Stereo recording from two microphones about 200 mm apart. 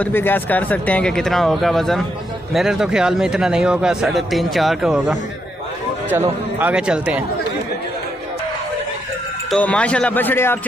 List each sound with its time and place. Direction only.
0.0 s speech: 10° left (ahead or behind)
6.6 s speech: 5° right (ahead or behind)
9.5 s speech: 5° left (ahead or behind)